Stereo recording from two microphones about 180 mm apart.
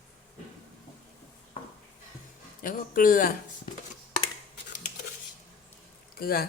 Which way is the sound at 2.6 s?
50° left (ahead or behind).